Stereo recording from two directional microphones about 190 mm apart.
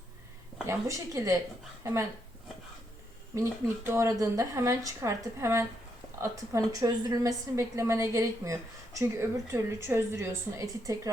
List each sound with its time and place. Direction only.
0.7 s a woman's voice: 15° right (ahead or behind)
3.3 s a woman's voice: 15° right (ahead or behind)